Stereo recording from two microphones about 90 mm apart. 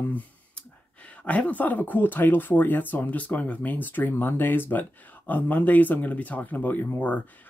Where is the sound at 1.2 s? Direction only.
15° left (ahead or behind).